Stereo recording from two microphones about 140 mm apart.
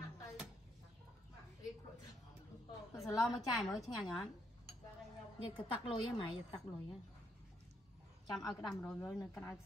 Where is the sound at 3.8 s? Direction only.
Centre (ahead or behind).